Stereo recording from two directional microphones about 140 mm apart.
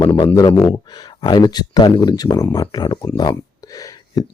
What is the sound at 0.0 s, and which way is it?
Speech, 30° left (ahead or behind).